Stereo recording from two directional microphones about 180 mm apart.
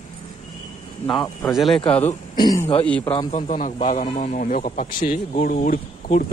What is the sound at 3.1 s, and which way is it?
Speech, 30° left (ahead or behind).